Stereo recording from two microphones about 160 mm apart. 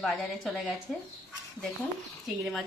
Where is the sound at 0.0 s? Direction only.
Centre (ahead or behind).